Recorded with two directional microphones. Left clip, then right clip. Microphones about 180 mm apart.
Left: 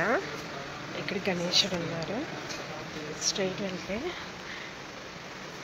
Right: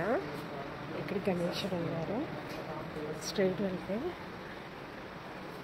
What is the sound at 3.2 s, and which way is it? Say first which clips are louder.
Speech: left 3 dB; 30° right (ahead or behind).